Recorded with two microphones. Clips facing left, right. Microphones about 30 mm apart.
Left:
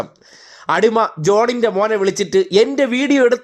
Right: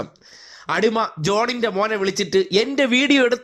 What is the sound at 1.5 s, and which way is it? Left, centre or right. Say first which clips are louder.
A man's voice: left 5 dB; right.